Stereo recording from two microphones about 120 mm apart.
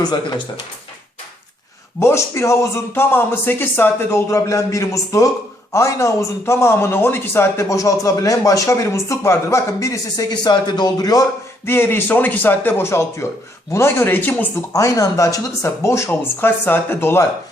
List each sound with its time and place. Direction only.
0.0 s speech: 35° left (ahead or behind)
2.0 s speech: 20° left (ahead or behind)
11.6 s speech: 20° left (ahead or behind)
14.7 s speech: 25° left (ahead or behind)